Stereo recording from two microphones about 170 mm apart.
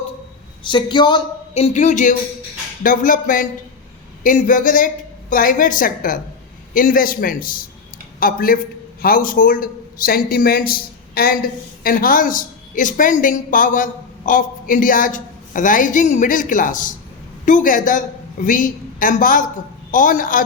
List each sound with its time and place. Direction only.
0.6 s a man's voice: 30° left (ahead or behind); by 20.4 s 55° left (ahead or behind)